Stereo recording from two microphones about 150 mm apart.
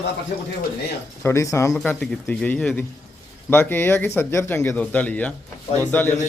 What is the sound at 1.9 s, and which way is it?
Speech, 10° left (ahead or behind).